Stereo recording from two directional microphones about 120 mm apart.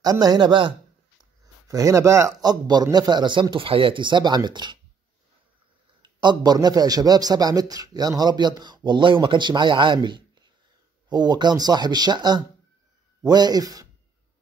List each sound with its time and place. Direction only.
0.0 s a man's voice: 30° right (ahead or behind)
1.7 s a man's voice: 25° right (ahead or behind)
6.0 s a man's voice: 35° right (ahead or behind)